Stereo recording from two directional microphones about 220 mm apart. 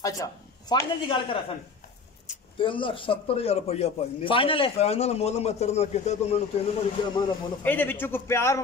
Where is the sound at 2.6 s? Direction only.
25° left (ahead or behind).